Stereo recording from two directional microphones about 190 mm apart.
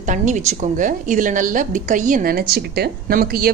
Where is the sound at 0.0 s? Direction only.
40° right (ahead or behind).